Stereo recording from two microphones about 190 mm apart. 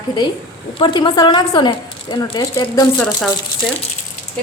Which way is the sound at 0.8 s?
25° left (ahead or behind).